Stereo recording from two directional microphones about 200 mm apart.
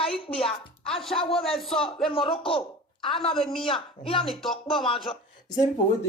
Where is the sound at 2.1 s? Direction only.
25° left (ahead or behind).